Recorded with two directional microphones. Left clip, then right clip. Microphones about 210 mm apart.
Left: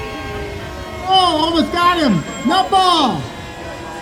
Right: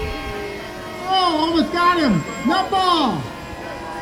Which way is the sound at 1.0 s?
50° left (ahead or behind).